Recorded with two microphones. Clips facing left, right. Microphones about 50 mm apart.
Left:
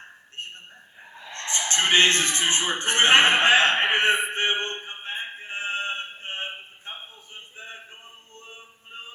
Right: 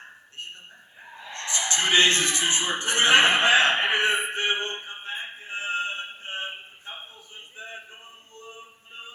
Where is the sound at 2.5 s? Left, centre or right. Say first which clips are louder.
Left 1 dB; left.